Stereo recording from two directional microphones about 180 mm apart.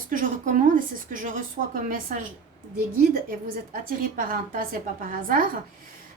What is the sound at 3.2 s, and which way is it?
A woman's voice, 50° right (ahead or behind).